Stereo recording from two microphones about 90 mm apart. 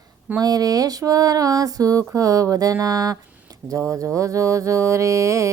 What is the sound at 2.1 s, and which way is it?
Music, 40° right (ahead or behind).